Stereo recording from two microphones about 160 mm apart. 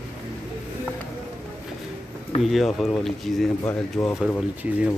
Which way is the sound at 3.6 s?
15° left (ahead or behind).